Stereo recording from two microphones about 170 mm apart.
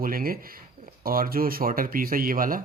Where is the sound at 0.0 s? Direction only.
60° right (ahead or behind).